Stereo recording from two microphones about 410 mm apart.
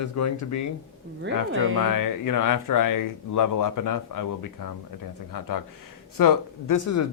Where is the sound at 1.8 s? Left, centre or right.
Left.